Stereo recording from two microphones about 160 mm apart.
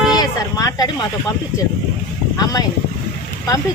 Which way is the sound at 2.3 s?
25° left (ahead or behind).